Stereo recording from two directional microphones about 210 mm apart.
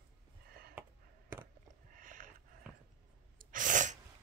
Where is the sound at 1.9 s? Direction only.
40° right (ahead or behind).